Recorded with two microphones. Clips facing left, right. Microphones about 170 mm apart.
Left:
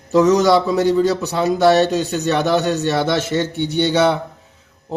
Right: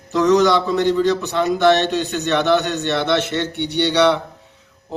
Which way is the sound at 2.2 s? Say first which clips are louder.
Right 1 dB; 40° left (ahead or behind).